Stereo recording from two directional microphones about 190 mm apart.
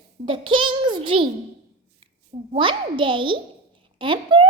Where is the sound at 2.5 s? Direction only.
25° right (ahead or behind).